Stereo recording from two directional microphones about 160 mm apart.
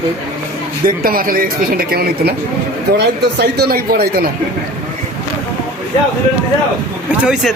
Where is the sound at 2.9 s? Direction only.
90° right; by 4.3 s 70° right (ahead or behind).